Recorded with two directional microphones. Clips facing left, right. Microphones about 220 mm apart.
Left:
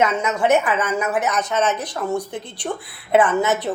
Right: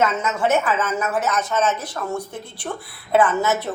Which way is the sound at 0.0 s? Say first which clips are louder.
Left 1 dB; 15° left (ahead or behind).